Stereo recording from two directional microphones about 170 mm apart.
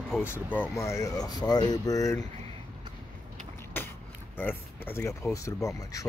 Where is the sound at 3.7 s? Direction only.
10° left (ahead or behind).